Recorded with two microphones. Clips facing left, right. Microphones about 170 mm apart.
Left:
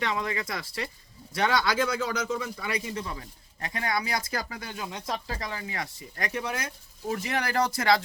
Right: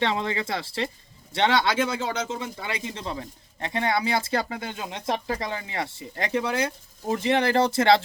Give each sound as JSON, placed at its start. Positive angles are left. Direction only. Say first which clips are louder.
{"t": 0.0, "sound": "speech", "louder": "right 4 dB", "side_deg": -30}